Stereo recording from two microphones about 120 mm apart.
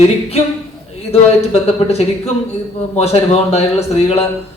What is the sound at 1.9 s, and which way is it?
Speech, 60° left (ahead or behind).